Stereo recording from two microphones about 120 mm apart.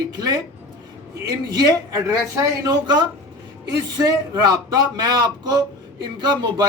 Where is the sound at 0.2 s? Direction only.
30° right (ahead or behind).